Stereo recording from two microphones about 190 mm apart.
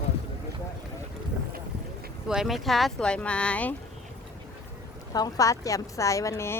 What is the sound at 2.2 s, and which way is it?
Speech, 5° right (ahead or behind).